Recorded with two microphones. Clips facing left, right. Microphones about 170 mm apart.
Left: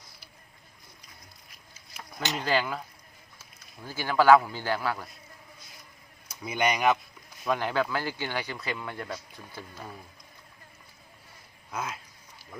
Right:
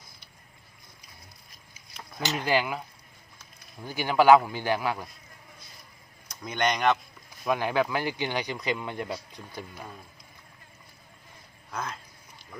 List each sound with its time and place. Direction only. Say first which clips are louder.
2.2 s a man's voice: right 1 dB; 10° right (ahead or behind)
3.8 s a man's voice: right 1 dB; 20° right (ahead or behind)
6.2 s speech: even; 10° left (ahead or behind)
7.4 s a man's voice: right 2 dB; 10° right (ahead or behind)
11.7 s speech: even; 10° left (ahead or behind)